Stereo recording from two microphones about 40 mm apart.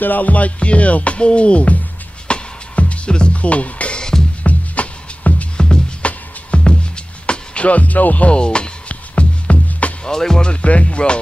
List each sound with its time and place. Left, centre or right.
0.0 s music: left
3.1 s speech: left
4.4 s music: left
8.3 s music: left
10.0 s music: centre
10.5 s music: left